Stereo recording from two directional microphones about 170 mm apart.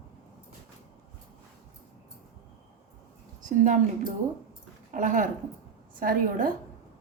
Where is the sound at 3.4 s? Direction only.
50° right (ahead or behind).